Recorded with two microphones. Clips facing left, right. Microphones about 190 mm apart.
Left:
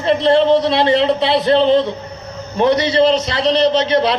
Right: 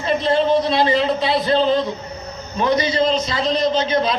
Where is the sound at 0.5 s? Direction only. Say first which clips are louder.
Left 3 dB; 70° left (ahead or behind).